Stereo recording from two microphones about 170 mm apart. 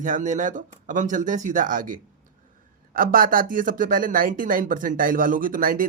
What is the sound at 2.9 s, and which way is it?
Speech, 55° right (ahead or behind).